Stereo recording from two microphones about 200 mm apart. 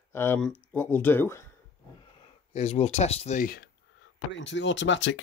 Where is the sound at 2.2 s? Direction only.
30° left (ahead or behind).